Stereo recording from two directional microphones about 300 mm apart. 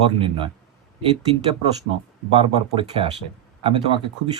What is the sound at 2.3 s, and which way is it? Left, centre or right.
Speech, centre.